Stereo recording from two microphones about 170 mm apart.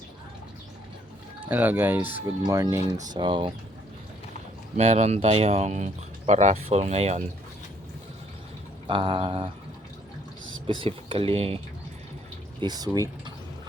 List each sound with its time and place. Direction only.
1.4 s speech: 10° right (ahead or behind); by 3.5 s 30° right (ahead or behind)
4.8 s speech: 40° right (ahead or behind)
8.9 s speech: 30° right (ahead or behind)
10.7 s speech: 30° right (ahead or behind)
12.5 s speech: 25° right (ahead or behind)